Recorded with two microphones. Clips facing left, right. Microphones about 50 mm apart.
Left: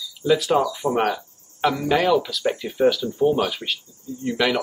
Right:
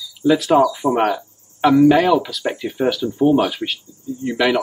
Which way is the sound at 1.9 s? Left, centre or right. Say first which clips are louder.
Right 5 dB; centre.